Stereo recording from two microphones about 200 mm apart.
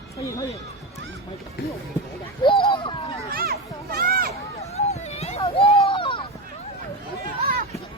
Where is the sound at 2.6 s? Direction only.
25° left (ahead or behind).